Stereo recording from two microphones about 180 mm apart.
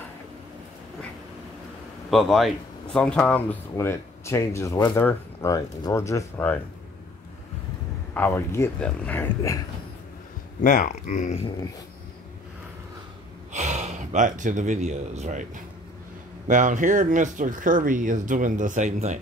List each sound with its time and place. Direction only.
2.0 s speech: centre (ahead or behind)
8.1 s speech: 10° left (ahead or behind)
10.6 s speech: 45° left (ahead or behind)
13.5 s speech: 40° right (ahead or behind)